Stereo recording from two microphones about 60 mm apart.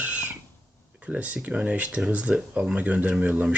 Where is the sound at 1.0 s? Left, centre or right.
Right.